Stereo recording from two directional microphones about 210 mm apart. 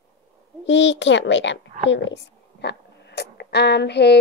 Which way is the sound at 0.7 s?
55° left (ahead or behind).